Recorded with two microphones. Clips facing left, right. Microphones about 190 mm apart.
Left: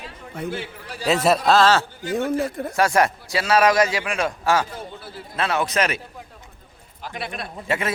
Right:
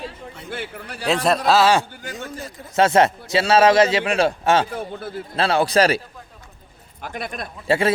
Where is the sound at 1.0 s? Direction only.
5° left (ahead or behind).